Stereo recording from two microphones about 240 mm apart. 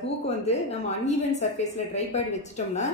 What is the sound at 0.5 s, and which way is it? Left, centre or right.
A woman's voice, left.